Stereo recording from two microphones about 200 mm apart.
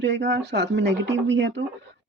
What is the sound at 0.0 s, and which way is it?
Speech, 60° right (ahead or behind).